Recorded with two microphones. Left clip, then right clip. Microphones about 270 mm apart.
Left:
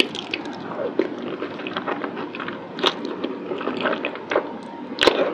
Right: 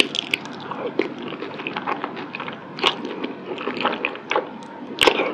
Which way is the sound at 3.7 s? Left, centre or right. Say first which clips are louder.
Right 2 dB; centre.